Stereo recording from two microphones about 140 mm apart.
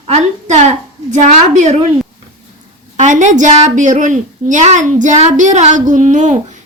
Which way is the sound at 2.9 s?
60° right (ahead or behind).